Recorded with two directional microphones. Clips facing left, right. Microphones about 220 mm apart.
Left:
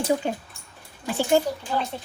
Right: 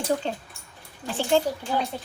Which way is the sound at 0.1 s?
10° left (ahead or behind).